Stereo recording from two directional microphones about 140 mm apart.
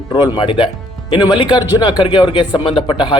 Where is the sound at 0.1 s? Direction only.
35° left (ahead or behind).